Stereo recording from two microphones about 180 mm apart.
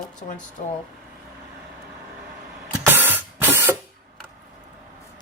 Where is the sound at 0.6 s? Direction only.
50° left (ahead or behind).